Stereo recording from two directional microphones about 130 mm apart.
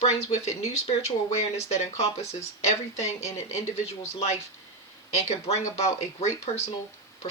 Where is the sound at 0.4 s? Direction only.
55° left (ahead or behind).